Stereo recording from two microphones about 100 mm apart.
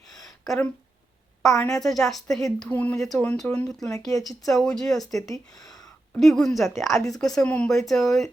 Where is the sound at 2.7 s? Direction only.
15° left (ahead or behind).